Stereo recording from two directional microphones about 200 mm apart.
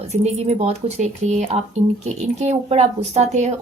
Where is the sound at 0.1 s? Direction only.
35° right (ahead or behind).